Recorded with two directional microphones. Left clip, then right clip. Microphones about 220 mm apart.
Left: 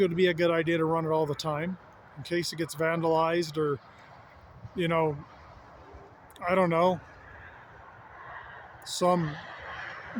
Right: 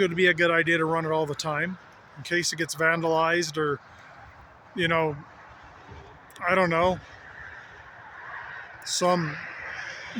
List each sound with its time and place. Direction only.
0.0 s speech: 5° left (ahead or behind)
6.4 s speech: 5° left (ahead or behind)
8.8 s speech: 5° left (ahead or behind)
9.2 s a sound: 15° left (ahead or behind)